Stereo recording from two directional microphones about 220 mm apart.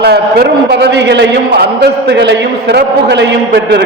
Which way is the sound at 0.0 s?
45° right (ahead or behind).